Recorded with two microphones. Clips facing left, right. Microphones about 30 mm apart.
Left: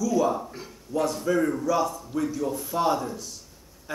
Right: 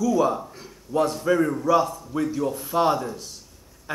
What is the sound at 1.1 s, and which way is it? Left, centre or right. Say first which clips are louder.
Speech: right 3 dB; centre.